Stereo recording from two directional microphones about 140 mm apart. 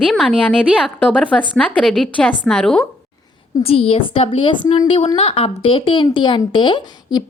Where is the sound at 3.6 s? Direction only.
45° left (ahead or behind).